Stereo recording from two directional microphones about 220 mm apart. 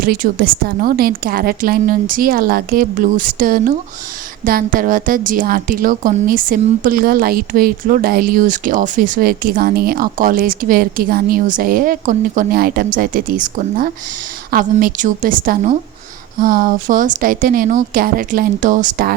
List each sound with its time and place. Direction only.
0.0 s a woman's voice: 40° right (ahead or behind)